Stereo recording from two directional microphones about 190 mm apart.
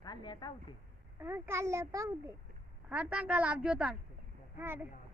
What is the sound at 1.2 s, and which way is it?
A child's voice, 15° right (ahead or behind).